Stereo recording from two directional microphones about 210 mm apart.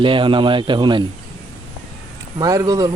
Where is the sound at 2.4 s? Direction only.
15° right (ahead or behind).